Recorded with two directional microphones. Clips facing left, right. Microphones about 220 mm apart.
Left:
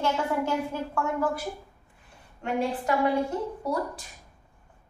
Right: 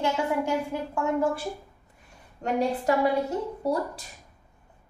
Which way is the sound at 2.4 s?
40° right (ahead or behind).